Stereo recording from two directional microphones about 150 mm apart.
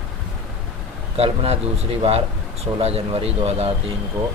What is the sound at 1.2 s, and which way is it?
Speech, 40° right (ahead or behind).